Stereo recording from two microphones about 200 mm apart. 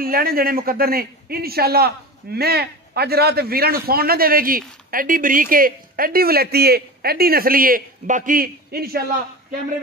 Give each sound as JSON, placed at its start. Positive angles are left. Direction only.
{"t": 0.0, "sound": "a man's voice", "side_deg": -45}